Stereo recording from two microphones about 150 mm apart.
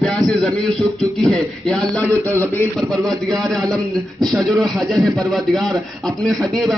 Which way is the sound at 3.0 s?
Centre (ahead or behind).